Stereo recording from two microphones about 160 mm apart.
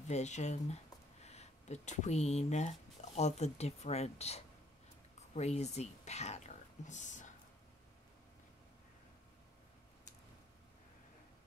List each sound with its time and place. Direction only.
0.1 s speech: 45° left (ahead or behind)